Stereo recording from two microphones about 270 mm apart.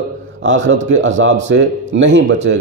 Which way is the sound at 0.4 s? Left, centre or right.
Right.